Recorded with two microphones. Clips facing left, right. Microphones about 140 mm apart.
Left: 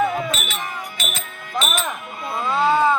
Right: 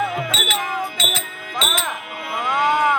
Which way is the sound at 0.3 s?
90° right.